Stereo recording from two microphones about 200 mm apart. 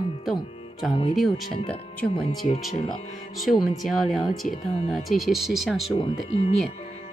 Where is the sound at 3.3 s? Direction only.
Centre (ahead or behind).